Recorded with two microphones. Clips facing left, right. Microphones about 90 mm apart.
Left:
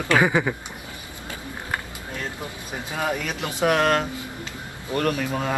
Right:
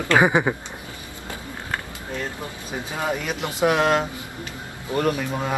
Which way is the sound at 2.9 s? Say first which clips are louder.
Even; 15° right (ahead or behind).